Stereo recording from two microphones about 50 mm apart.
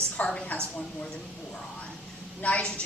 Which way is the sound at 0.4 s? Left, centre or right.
Left.